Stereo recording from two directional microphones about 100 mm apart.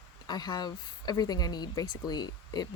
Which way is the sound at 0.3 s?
45° left (ahead or behind).